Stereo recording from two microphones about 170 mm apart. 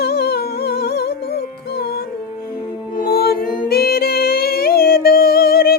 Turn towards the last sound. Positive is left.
turn(degrees=65)  # may be behind; listen again after turning